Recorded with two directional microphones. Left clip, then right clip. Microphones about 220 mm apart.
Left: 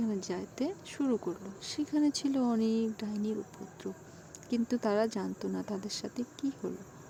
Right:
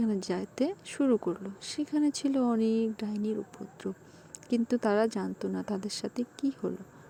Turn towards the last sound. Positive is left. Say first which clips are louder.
# right 4 dB
turn(degrees=-20)  # may be behind; listen again after turning